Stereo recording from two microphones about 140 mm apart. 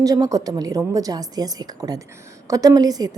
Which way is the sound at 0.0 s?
25° right (ahead or behind).